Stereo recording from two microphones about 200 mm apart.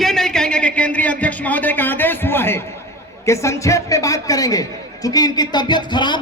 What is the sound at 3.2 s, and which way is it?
A man's voice, 15° left (ahead or behind).